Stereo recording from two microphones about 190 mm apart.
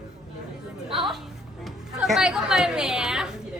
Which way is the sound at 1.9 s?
5° right (ahead or behind).